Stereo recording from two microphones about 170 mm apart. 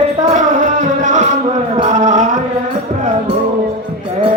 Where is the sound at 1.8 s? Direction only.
45° right (ahead or behind).